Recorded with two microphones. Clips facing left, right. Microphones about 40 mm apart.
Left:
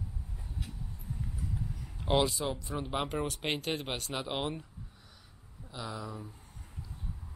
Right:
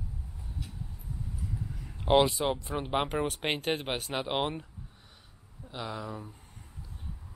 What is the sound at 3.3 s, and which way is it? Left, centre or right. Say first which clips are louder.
Speech: right 3 dB; centre.